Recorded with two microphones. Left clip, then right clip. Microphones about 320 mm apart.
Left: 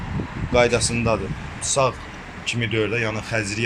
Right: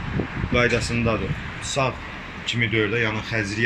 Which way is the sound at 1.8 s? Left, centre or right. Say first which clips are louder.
Left 3 dB; centre.